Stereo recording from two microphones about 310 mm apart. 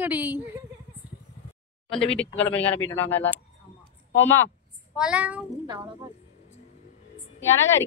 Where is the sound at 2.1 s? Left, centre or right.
Centre.